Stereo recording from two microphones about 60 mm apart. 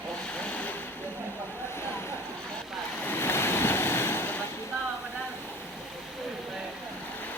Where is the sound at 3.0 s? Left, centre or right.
Left.